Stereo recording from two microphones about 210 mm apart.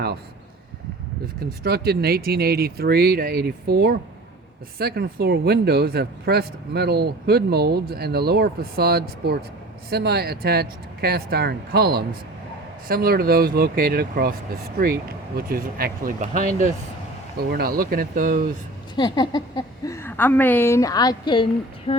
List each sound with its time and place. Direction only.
1.4 s speech: 50° right (ahead or behind)
18.9 s a woman's voice: 20° left (ahead or behind)
21.9 s a sound: 25° left (ahead or behind)